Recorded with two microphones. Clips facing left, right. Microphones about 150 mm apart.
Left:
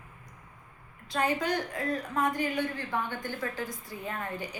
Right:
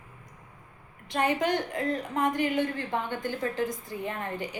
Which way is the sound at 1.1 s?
20° right (ahead or behind).